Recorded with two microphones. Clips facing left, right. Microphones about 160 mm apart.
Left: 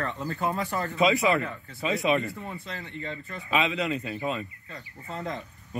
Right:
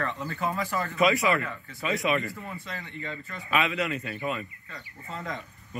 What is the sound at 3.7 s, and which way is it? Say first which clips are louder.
Speech: left 1 dB; centre (ahead or behind).